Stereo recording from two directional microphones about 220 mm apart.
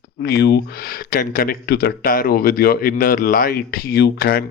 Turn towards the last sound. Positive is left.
turn(degrees=45)  # may be behind; listen again after turning